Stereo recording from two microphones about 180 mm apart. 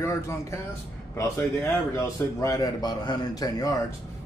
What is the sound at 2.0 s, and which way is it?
A man's voice, 20° left (ahead or behind).